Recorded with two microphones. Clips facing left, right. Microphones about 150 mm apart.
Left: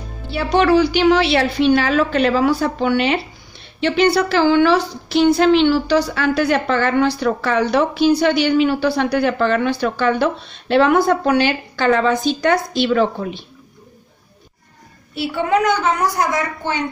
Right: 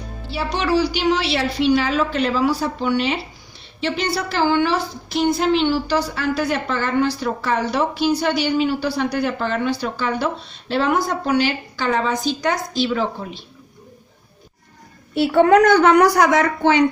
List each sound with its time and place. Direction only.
0.3 s a woman's voice: 55° left (ahead or behind)
15.1 s a child's voice: 50° right (ahead or behind)
15.6 s a woman's voice: 65° right (ahead or behind); by 16.8 s 90° right